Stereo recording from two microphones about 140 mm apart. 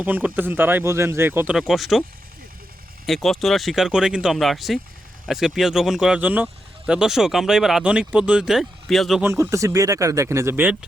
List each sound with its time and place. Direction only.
0.0 s speech: 10° right (ahead or behind)
1.5 s speech: centre (ahead or behind)
3.1 s speech: centre (ahead or behind)
9.2 s speech: 20° right (ahead or behind)